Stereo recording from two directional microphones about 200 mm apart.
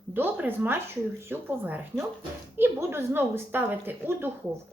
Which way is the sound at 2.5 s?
10° right (ahead or behind).